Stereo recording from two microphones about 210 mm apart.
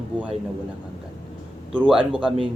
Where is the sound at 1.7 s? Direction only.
5° right (ahead or behind).